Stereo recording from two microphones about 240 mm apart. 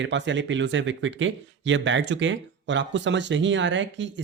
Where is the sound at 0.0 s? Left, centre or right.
Right.